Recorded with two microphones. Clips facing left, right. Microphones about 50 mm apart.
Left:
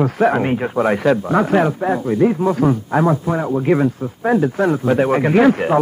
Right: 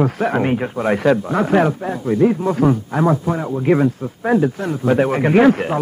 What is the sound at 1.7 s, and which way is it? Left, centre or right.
Speech, left.